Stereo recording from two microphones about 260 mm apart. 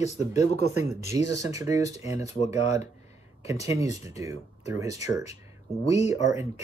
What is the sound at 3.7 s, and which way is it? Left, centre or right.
Speech, centre.